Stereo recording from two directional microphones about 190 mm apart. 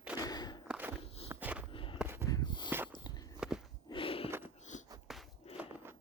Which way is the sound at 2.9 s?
20° left (ahead or behind).